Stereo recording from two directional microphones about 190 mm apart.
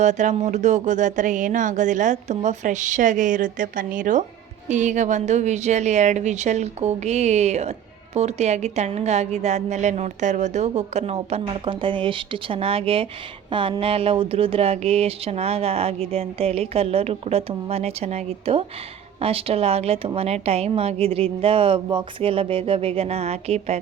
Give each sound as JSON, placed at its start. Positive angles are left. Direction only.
{"t": 0.0, "sound": "a woman's voice", "side_deg": -40}